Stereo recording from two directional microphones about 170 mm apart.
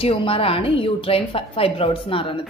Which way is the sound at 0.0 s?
35° left (ahead or behind).